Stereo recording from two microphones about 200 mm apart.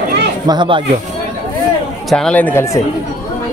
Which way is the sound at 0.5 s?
20° right (ahead or behind).